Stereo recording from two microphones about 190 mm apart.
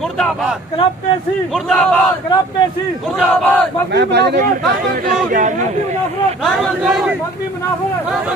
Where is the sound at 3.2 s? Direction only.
10° left (ahead or behind).